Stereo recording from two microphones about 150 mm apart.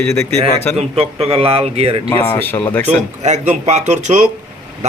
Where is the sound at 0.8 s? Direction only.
45° right (ahead or behind).